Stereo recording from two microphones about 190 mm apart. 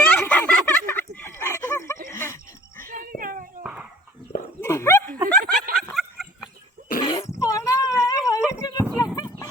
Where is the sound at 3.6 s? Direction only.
5° right (ahead or behind).